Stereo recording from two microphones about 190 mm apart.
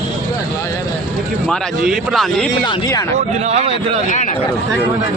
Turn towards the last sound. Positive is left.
turn(degrees=-35)  # may be behind; listen again after turning